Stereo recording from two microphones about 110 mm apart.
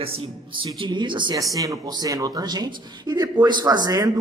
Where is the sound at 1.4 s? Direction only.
30° right (ahead or behind).